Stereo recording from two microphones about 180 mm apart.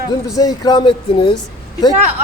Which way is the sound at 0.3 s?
20° left (ahead or behind).